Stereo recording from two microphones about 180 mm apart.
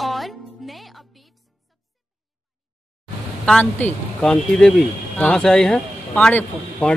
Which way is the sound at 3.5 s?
5° left (ahead or behind).